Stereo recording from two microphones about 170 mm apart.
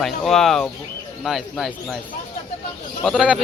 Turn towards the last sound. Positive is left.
turn(degrees=-5)  # may be behind; listen again after turning